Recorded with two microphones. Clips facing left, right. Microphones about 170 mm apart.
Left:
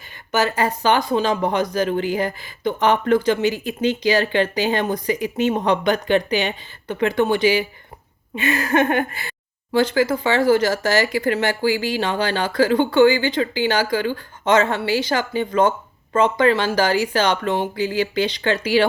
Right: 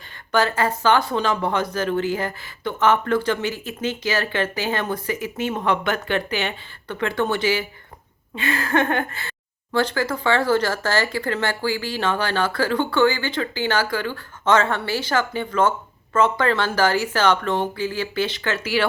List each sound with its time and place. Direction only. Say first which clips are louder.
0.3 s speech: even; 10° left (ahead or behind)